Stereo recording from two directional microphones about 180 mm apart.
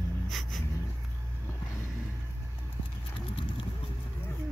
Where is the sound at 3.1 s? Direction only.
30° left (ahead or behind).